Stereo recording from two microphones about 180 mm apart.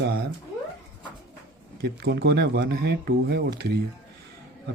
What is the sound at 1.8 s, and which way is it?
Speech, 60° right (ahead or behind).